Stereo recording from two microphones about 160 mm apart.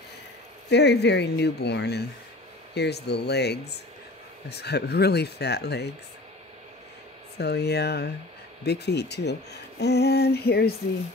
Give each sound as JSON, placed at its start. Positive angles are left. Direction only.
{"t": 0.7, "sound": "speech", "side_deg": 90}
{"t": 7.3, "sound": "speech", "side_deg": 90}